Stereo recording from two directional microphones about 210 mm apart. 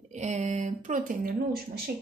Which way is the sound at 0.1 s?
35° right (ahead or behind).